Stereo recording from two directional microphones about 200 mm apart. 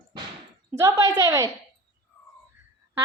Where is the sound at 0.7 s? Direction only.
15° right (ahead or behind).